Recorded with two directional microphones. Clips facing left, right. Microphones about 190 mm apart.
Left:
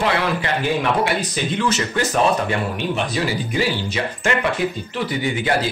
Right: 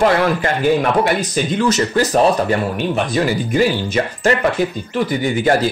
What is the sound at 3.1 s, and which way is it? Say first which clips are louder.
Speech: right 5 dB; 50° right (ahead or behind).